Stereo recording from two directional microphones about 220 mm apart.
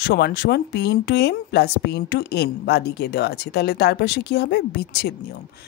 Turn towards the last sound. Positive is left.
turn(degrees=50)  # may be behind; listen again after turning